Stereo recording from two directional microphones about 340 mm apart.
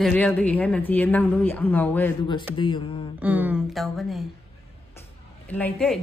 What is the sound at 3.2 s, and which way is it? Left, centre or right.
Speech, centre.